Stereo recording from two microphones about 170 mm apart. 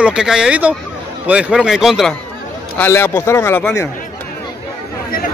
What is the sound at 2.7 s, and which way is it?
Speech, 15° left (ahead or behind).